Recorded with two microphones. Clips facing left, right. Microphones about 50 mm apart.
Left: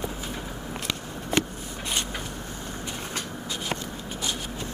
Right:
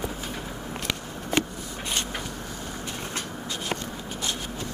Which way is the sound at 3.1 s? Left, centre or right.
Centre.